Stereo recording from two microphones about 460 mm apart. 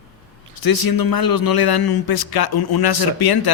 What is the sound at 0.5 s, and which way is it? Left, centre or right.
A man's voice, left.